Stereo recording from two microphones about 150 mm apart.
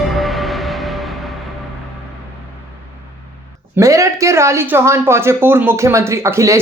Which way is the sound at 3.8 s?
20° right (ahead or behind).